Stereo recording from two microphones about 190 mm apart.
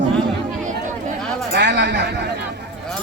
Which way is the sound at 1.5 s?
65° right (ahead or behind).